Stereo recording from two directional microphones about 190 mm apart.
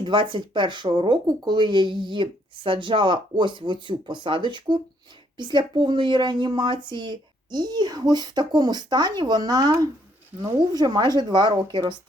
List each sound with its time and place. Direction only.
0.0 s speech: 25° right (ahead or behind)